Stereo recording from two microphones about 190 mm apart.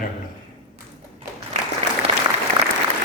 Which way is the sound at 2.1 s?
30° right (ahead or behind).